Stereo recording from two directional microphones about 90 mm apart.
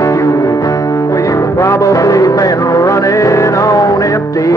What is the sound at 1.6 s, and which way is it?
Music, 35° left (ahead or behind).